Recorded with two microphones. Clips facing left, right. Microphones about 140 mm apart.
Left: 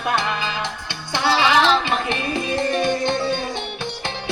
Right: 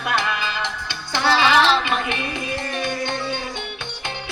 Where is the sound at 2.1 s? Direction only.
30° left (ahead or behind).